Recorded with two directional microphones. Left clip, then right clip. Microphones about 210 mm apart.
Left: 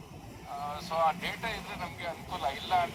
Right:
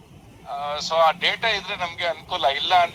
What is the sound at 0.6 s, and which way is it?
A man's voice, 45° right (ahead or behind).